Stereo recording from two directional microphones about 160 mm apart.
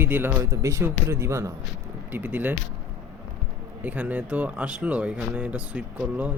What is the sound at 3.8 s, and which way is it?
Speech, 10° right (ahead or behind).